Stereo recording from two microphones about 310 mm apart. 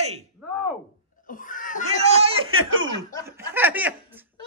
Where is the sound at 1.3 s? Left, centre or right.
Left.